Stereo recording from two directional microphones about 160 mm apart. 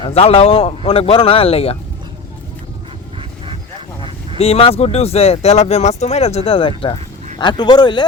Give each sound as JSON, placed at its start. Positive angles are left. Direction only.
{"t": 0.0, "sound": "speech", "side_deg": 40}
{"t": 4.4, "sound": "speech", "side_deg": 40}